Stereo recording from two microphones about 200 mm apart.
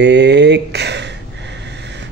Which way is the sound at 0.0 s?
60° right (ahead or behind).